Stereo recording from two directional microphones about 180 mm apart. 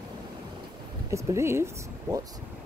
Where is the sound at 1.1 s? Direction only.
15° right (ahead or behind).